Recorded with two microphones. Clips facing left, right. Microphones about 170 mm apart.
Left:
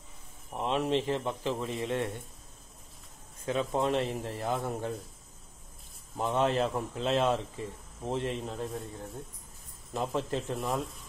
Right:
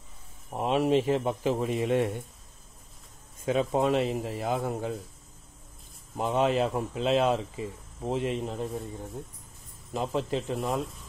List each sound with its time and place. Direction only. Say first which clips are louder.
0.6 s speech: right 5 dB; 10° right (ahead or behind)
3.4 s speech: right 4 dB; 15° right (ahead or behind)
6.1 s speech: right 2 dB; 10° right (ahead or behind)
9.9 s speech: right 2 dB; centre (ahead or behind)